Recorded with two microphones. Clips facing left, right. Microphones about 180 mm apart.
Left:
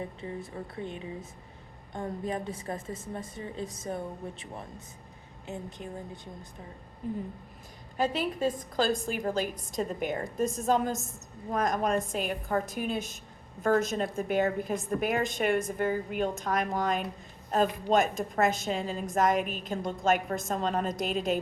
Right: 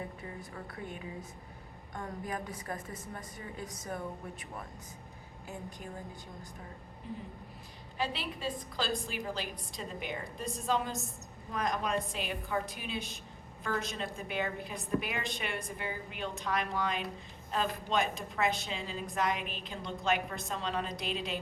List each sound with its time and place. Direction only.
0.2 s a woman's voice: 25° left (ahead or behind)
7.0 s a woman's voice: 45° left (ahead or behind)